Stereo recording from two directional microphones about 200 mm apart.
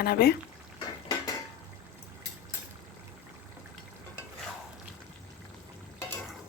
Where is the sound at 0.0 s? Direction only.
50° left (ahead or behind).